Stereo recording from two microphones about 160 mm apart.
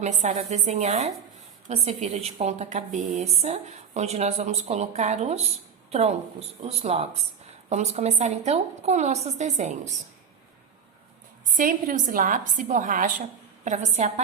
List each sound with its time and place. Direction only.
0.0 s a woman's voice: 45° right (ahead or behind)
11.5 s a woman's voice: 55° right (ahead or behind)